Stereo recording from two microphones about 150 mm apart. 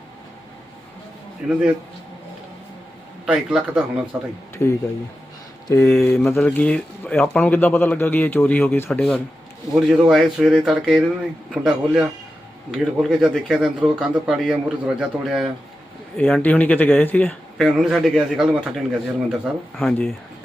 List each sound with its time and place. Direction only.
1.4 s a man's voice: 5° right (ahead or behind)
3.2 s speech: 5° right (ahead or behind)
5.6 s speech: 20° left (ahead or behind)
5.9 s speech: 5° left (ahead or behind)
8.9 s a man's voice: 5° left (ahead or behind)
16.1 s speech: 10° left (ahead or behind)
17.6 s a man's voice: centre (ahead or behind)